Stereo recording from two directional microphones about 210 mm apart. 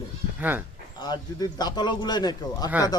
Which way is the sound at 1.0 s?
20° left (ahead or behind).